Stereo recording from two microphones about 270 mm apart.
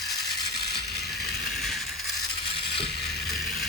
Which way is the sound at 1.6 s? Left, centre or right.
Centre.